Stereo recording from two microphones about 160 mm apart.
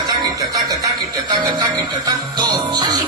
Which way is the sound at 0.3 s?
20° right (ahead or behind).